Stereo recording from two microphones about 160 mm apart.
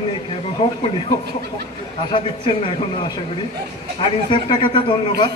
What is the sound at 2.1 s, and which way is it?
Speech, 35° left (ahead or behind).